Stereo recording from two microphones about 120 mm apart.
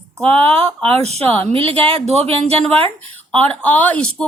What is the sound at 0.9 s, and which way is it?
Speech, 60° right (ahead or behind).